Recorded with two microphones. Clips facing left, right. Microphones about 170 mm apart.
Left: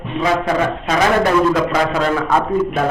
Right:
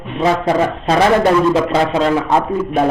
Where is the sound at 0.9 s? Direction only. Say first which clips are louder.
Right 3 dB; 30° right (ahead or behind).